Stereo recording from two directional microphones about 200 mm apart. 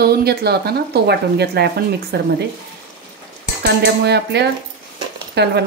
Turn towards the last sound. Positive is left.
turn(degrees=-55)  # may be behind; listen again after turning